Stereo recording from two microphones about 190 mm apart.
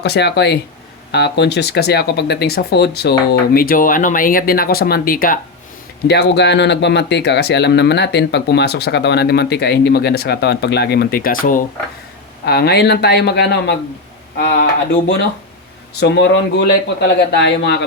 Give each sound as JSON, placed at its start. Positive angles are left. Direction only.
{"t": 0.0, "sound": "speech", "side_deg": 60}
{"t": 6.1, "sound": "speech", "side_deg": 60}
{"t": 12.5, "sound": "speech", "side_deg": 55}
{"t": 14.3, "sound": "speech", "side_deg": 50}
{"t": 16.0, "sound": "speech", "side_deg": 65}